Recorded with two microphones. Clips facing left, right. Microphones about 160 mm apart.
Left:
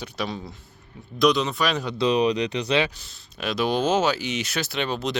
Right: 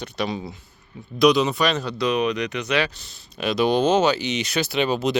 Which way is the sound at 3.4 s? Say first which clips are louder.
Right 4 dB; centre (ahead or behind).